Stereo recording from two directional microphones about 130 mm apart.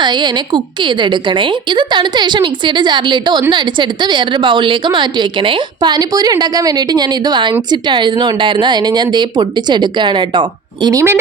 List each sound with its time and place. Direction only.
0.0 s a woman's voice: 35° right (ahead or behind)
10.8 s speech: 20° right (ahead or behind)